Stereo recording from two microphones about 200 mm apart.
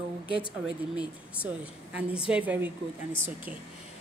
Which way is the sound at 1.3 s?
5° right (ahead or behind).